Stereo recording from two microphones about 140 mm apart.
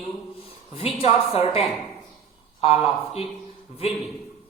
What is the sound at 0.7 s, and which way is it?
Speech, 45° left (ahead or behind).